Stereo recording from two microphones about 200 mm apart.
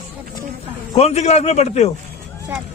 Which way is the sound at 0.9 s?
30° left (ahead or behind).